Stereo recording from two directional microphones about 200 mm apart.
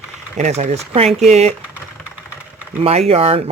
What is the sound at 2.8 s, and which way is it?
Speech, 30° right (ahead or behind).